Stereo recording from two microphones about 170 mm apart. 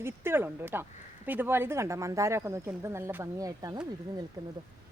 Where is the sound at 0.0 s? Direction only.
15° right (ahead or behind).